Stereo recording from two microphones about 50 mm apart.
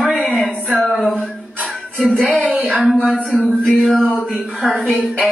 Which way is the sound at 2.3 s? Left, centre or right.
Centre.